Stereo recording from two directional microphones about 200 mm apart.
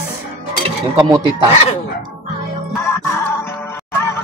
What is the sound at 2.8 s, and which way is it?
Music, 10° left (ahead or behind).